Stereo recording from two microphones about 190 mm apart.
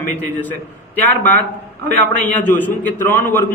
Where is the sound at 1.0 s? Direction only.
10° left (ahead or behind).